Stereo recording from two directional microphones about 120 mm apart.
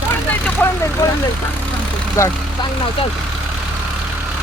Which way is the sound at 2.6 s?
35° left (ahead or behind).